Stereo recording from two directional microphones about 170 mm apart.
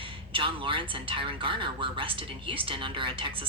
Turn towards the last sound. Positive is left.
turn(degrees=-30)  # may be behind; listen again after turning